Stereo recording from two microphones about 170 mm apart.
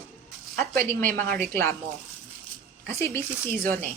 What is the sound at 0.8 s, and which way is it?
Speech, 15° left (ahead or behind).